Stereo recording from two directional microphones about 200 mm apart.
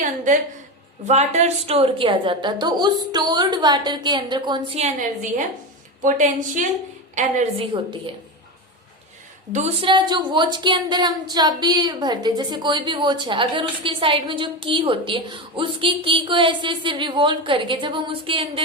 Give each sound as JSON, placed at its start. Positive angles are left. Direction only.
{"t": 1.0, "sound": "a woman's voice", "side_deg": -35}
{"t": 6.0, "sound": "a woman's voice", "side_deg": -40}
{"t": 9.5, "sound": "a woman's voice", "side_deg": -35}